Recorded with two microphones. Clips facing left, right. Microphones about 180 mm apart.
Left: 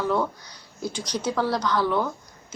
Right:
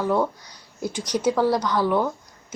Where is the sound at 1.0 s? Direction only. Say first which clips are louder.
Right 6 dB; 45° right (ahead or behind).